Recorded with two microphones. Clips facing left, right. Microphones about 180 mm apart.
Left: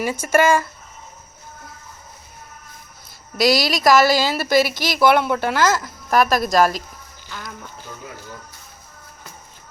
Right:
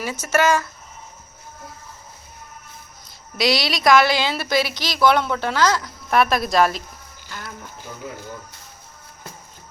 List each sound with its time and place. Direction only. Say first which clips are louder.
0.0 s speech: left 3 dB; 10° left (ahead or behind)
3.5 s a woman's voice: even; 45° left (ahead or behind)
4.3 s speech: left 3 dB; 5° left (ahead or behind)
4.5 s a woman's voice: left 5 dB; 45° left (ahead or behind)
4.9 s speech: right 1 dB; 10° left (ahead or behind)